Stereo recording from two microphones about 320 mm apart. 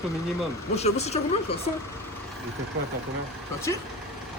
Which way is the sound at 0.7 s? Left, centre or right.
Centre.